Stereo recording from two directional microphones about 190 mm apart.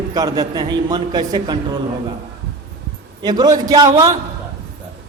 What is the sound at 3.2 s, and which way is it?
Speech, 20° right (ahead or behind).